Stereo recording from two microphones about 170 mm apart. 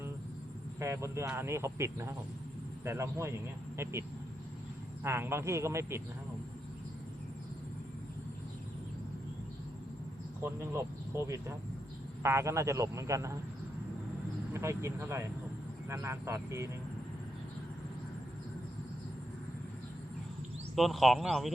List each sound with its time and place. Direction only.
0.8 s speech: 15° right (ahead or behind)
5.0 s speech: 15° right (ahead or behind)
10.4 s speech: 15° right (ahead or behind)
14.5 s speech: 15° right (ahead or behind)
20.7 s speech: centre (ahead or behind)